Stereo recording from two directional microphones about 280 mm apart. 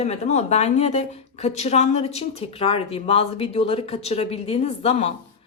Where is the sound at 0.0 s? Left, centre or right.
Left.